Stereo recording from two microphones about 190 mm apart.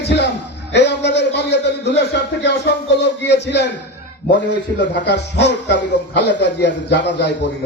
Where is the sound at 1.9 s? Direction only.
65° left (ahead or behind).